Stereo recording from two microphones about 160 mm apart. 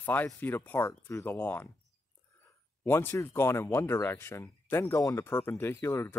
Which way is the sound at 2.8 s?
15° left (ahead or behind).